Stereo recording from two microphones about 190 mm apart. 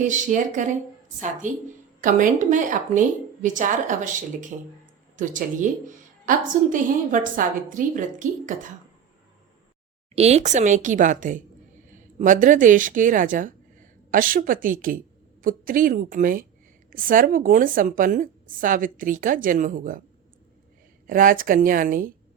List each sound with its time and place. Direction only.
0.3 s a woman's voice: 40° right (ahead or behind)
10.2 s a woman's voice: 35° right (ahead or behind)
21.1 s a woman's voice: 45° right (ahead or behind)